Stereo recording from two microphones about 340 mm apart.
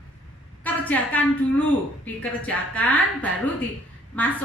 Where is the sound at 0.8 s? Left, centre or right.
Centre.